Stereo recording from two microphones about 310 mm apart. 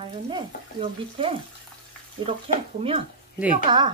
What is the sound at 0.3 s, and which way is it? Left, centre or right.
Speech, centre.